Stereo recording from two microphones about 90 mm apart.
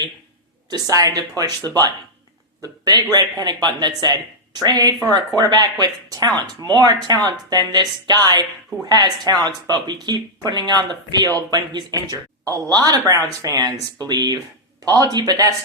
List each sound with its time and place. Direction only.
0.7 s speech: 40° right (ahead or behind)
1.6 s speech: 25° left (ahead or behind)
2.6 s speech: 45° right (ahead or behind)